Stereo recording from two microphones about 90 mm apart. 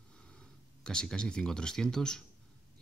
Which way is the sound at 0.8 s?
10° left (ahead or behind).